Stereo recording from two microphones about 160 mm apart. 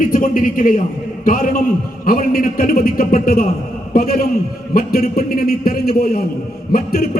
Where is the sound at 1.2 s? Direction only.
60° left (ahead or behind).